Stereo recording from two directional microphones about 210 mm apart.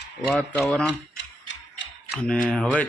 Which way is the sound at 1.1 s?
60° left (ahead or behind).